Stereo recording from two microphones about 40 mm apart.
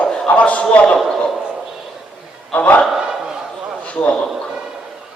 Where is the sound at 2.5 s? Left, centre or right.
Left.